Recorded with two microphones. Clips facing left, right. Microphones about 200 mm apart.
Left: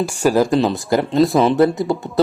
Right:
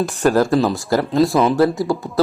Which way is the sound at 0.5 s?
Centre (ahead or behind).